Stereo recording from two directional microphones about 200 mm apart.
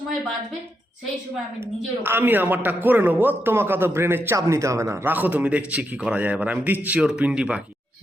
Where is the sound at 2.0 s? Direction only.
10° right (ahead or behind).